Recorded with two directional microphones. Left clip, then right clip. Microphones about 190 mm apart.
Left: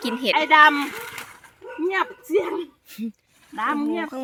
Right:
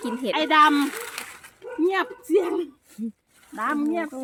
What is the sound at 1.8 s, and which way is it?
Speech, 45° right (ahead or behind).